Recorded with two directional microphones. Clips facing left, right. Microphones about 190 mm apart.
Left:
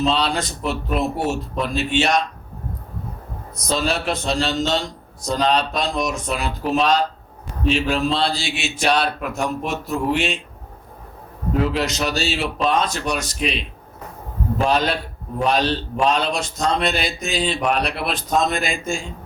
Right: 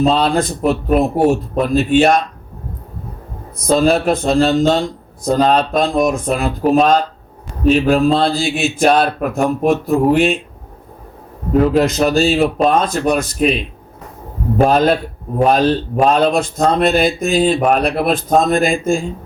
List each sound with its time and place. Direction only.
0.0 s speech: 50° right (ahead or behind)
3.7 s speech: 55° right (ahead or behind)
11.5 s speech: 45° right (ahead or behind)